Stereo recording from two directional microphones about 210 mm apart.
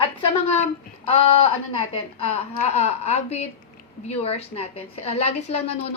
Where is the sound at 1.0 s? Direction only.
25° left (ahead or behind).